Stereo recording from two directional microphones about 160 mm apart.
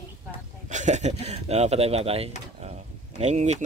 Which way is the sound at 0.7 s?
45° right (ahead or behind).